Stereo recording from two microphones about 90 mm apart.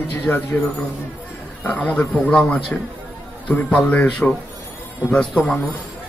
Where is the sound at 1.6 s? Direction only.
15° left (ahead or behind).